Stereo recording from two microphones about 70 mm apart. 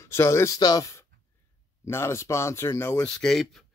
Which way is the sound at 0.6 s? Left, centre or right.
Left.